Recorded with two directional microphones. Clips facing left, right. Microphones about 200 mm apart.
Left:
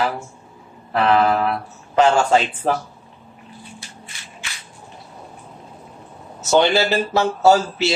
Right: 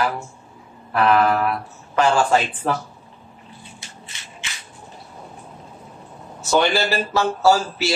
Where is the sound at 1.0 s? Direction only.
25° left (ahead or behind).